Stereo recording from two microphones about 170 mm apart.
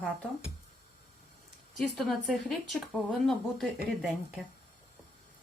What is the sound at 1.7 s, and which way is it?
A woman's voice, centre (ahead or behind).